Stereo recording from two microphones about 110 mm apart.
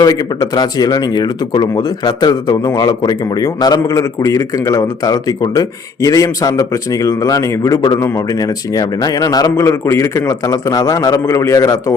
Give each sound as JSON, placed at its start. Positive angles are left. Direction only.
{"t": 0.0, "sound": "speech", "side_deg": 35}